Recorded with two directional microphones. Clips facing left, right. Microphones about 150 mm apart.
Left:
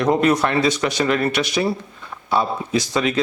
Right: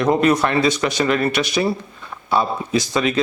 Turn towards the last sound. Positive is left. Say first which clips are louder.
# right 1 dB
turn(degrees=-10)  # may be behind; listen again after turning